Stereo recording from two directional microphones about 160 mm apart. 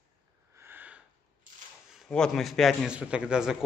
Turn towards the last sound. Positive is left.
turn(degrees=-5)  # may be behind; listen again after turning